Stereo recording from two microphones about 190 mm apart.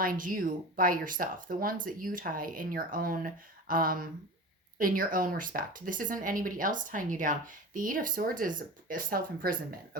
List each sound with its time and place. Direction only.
0.0 s speech: 45° right (ahead or behind)